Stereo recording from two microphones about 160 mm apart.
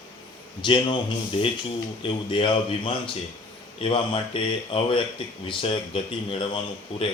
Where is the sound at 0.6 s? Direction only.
30° left (ahead or behind).